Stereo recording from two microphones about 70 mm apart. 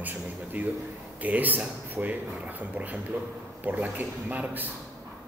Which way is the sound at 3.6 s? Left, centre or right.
Right.